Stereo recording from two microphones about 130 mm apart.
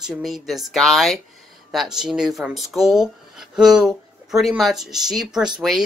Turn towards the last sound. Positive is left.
turn(degrees=0)  # may be behind; listen again after turning